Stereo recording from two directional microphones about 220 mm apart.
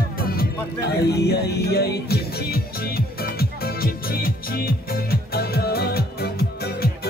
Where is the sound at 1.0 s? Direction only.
50° left (ahead or behind).